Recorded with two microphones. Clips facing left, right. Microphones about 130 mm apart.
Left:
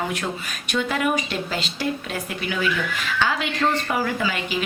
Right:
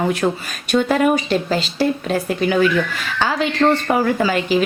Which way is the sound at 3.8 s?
45° right (ahead or behind).